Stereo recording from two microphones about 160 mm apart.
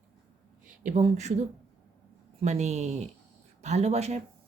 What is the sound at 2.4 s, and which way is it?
A woman's voice, 45° right (ahead or behind).